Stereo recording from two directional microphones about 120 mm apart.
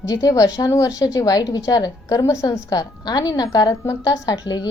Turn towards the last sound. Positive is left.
turn(degrees=35)  # may be behind; listen again after turning